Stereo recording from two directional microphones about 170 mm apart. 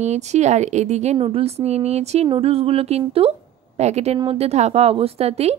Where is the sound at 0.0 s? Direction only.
40° right (ahead or behind).